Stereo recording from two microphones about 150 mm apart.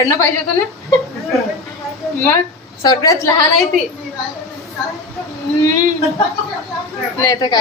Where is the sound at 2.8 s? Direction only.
25° left (ahead or behind).